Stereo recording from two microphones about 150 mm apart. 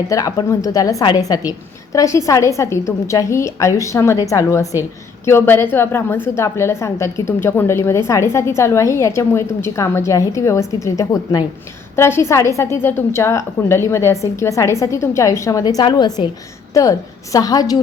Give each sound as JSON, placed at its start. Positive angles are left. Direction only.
{"t": 0.1, "sound": "a woman's voice", "side_deg": 20}
{"t": 17.3, "sound": "a woman's voice", "side_deg": 25}